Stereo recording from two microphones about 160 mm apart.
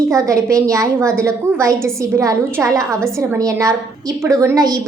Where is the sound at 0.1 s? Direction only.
20° right (ahead or behind).